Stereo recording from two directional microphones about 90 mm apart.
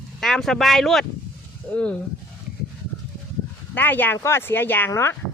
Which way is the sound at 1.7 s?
15° left (ahead or behind).